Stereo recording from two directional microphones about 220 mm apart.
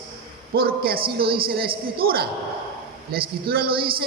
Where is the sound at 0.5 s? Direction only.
45° right (ahead or behind).